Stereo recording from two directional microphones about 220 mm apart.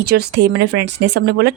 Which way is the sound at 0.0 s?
45° right (ahead or behind).